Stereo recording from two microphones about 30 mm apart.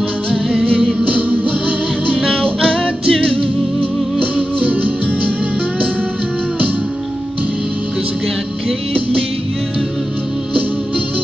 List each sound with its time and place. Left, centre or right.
1.0 s music: right
2.1 s music: right
2.7 s music: left
4.2 s music: right